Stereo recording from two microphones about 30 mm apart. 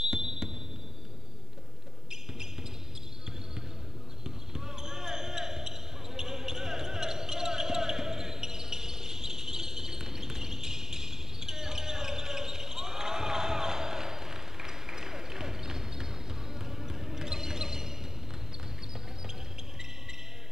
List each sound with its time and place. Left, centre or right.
0.0 s basketball bounce: centre
4.2 s basketball bounce: centre